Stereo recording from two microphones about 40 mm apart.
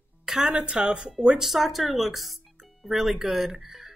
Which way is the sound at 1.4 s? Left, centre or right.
Centre.